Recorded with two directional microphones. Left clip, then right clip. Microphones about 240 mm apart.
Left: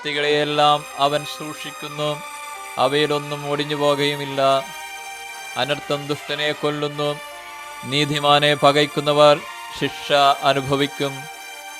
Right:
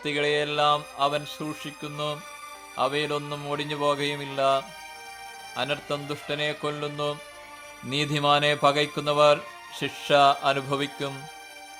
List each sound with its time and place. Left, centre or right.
0.0 s speech: centre